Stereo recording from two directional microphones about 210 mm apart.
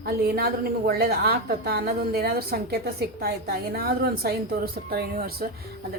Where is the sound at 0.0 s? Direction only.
45° right (ahead or behind).